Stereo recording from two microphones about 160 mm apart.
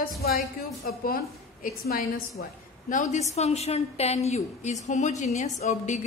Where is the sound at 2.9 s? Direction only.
50° left (ahead or behind).